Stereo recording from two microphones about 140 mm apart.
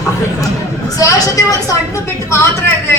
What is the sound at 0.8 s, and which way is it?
A woman's voice, 25° left (ahead or behind).